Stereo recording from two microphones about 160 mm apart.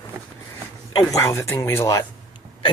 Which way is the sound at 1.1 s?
20° left (ahead or behind).